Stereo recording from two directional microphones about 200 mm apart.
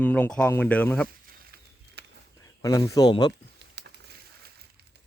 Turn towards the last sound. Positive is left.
turn(degrees=-55)  # may be behind; listen again after turning